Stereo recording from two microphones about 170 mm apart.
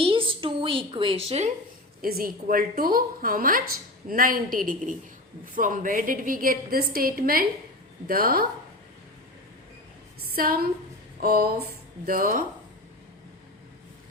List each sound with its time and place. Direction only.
0.0 s a sound: 30° right (ahead or behind)
2.0 s a woman's voice: 60° right (ahead or behind)
10.2 s a woman's voice: 60° right (ahead or behind)